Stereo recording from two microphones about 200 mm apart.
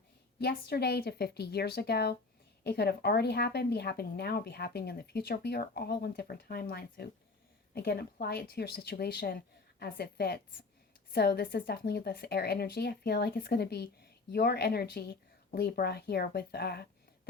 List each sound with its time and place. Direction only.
0.3 s speech: 55° left (ahead or behind)